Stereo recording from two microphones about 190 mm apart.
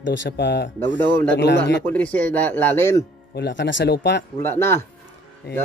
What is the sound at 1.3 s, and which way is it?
Speech, 65° left (ahead or behind).